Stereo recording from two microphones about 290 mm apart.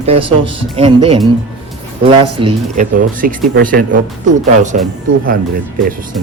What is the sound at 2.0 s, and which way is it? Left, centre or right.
Speech, centre.